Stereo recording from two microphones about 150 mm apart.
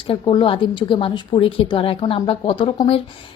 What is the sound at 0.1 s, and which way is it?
A woman's voice, 35° left (ahead or behind).